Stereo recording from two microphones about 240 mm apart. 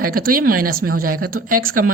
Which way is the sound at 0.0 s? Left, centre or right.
Right.